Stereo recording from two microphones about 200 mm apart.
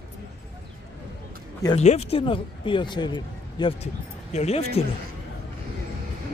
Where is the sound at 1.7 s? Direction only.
35° left (ahead or behind).